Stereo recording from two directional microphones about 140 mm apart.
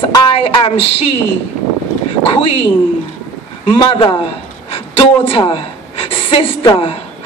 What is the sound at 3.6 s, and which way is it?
A woman's voice, 35° left (ahead or behind).